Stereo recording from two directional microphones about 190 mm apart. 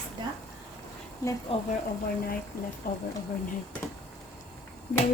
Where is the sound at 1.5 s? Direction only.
30° left (ahead or behind).